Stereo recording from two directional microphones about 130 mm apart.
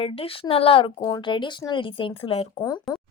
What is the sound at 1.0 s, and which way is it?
A woman's voice, 35° left (ahead or behind).